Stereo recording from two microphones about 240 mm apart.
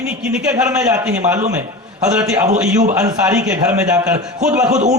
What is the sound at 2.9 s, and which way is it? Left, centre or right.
A man's voice, centre.